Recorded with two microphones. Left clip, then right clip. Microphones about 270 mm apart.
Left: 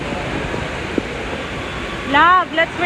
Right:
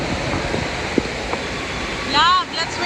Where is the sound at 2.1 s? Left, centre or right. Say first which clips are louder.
Left 4 dB; right.